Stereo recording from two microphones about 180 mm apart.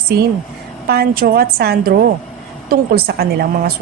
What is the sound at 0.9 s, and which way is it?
A woman's voice, 55° right (ahead or behind).